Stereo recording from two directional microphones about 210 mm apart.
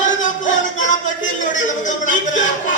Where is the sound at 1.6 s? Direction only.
35° left (ahead or behind).